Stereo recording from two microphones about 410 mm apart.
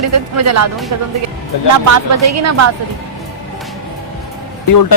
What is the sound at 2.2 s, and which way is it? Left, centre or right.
Speech, right.